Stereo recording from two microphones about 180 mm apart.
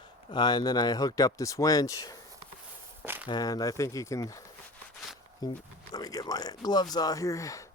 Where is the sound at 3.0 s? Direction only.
10° right (ahead or behind).